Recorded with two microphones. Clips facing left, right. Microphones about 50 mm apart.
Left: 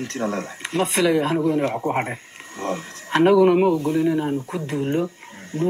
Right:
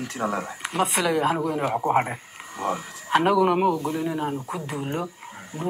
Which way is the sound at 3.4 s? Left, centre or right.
Centre.